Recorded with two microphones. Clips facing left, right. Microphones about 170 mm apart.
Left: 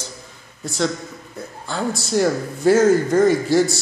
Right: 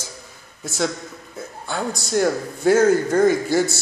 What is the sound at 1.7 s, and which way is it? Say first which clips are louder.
A man's voice: left 2 dB; centre (ahead or behind).